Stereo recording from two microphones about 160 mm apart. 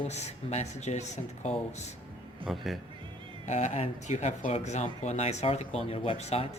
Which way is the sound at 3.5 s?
45° left (ahead or behind).